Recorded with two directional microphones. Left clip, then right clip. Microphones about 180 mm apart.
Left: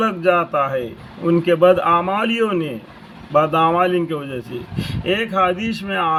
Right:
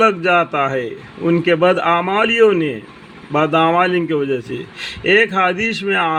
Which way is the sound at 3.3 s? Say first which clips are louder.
Right 1 dB; 30° right (ahead or behind).